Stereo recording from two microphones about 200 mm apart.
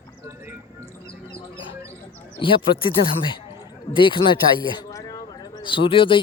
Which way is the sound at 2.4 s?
25° left (ahead or behind).